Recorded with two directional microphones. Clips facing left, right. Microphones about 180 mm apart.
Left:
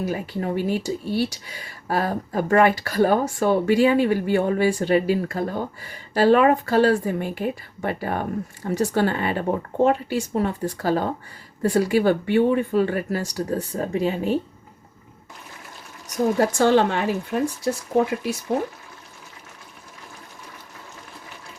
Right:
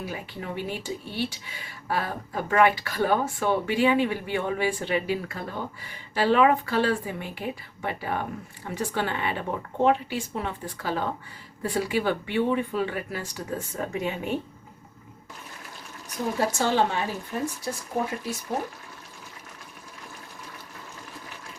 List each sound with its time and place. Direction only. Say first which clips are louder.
0.0 s speech: left 9 dB; 40° left (ahead or behind)
16.6 s speech: left 6 dB; 60° left (ahead or behind)